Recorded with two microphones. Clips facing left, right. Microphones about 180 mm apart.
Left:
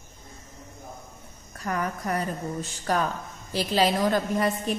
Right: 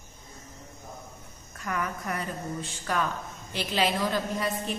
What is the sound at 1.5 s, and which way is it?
A woman's voice, 35° left (ahead or behind).